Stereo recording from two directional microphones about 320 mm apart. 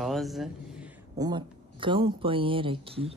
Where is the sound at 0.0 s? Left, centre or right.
Centre.